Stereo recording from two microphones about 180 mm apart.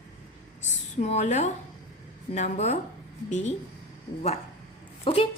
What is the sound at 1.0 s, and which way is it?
A woman's voice, 40° left (ahead or behind).